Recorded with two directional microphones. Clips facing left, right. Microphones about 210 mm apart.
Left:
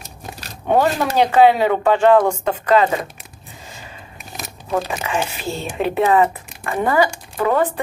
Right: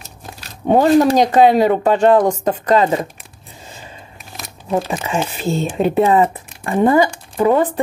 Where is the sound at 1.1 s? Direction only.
40° right (ahead or behind).